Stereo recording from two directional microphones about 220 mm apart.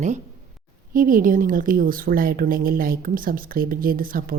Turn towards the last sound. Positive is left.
turn(degrees=-40)  # may be behind; listen again after turning